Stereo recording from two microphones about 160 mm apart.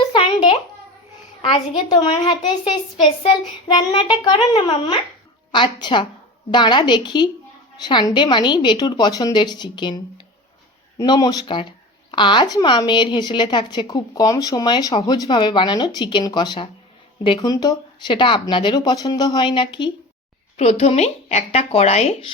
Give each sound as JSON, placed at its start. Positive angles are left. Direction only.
{"t": 0.1, "sound": "a sound", "side_deg": 35}
{"t": 1.4, "sound": "a woman's voice", "side_deg": 30}
{"t": 3.9, "sound": "a woman's voice", "side_deg": 30}
{"t": 20.6, "sound": "speech", "side_deg": 40}